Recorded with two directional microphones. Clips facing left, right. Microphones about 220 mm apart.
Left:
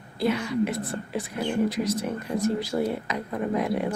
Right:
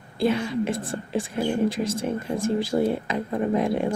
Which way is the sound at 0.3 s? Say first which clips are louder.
Right 1 dB; 25° right (ahead or behind).